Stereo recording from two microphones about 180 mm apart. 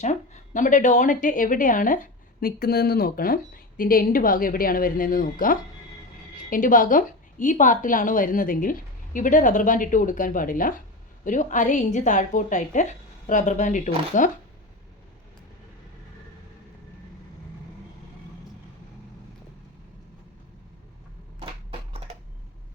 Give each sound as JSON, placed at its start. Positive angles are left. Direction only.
{"t": 0.0, "sound": "a woman's voice", "side_deg": 40}
{"t": 21.4, "sound": "crushing", "side_deg": -35}